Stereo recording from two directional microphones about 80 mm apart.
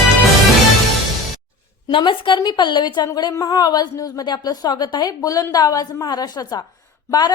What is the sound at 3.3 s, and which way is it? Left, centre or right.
A woman's voice, left.